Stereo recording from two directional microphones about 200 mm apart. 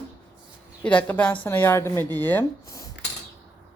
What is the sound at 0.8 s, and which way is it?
Child singing, 5° left (ahead or behind).